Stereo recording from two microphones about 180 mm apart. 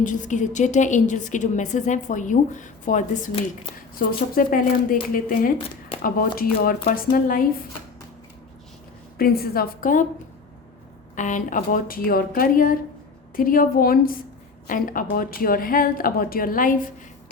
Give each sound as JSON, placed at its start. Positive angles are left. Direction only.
{"t": 0.0, "sound": "a woman's voice", "side_deg": 45}
{"t": 9.1, "sound": "a woman's voice", "side_deg": 55}
{"t": 11.1, "sound": "a woman's voice", "side_deg": 45}